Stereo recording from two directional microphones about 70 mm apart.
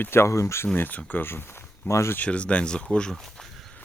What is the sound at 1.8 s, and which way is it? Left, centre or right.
Speech, left.